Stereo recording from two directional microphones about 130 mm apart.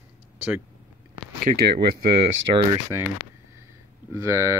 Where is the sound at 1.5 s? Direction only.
70° right (ahead or behind).